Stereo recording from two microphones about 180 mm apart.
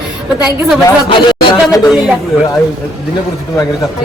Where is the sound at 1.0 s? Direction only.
25° left (ahead or behind).